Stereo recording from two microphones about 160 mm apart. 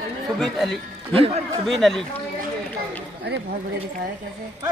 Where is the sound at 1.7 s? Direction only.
Centre (ahead or behind).